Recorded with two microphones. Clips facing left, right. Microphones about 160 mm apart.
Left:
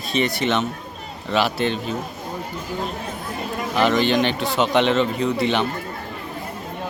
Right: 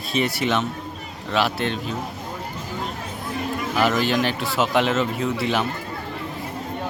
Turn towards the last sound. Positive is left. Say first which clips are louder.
# left 2 dB
turn(degrees=-5)  # may be behind; listen again after turning